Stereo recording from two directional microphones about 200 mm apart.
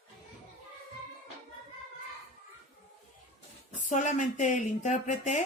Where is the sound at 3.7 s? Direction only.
40° left (ahead or behind).